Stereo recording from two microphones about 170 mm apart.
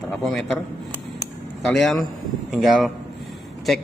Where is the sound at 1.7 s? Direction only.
Centre (ahead or behind).